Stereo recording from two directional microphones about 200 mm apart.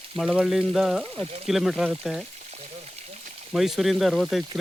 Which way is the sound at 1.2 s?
30° right (ahead or behind).